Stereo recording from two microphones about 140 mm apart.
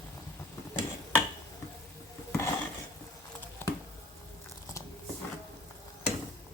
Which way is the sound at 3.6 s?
15° left (ahead or behind).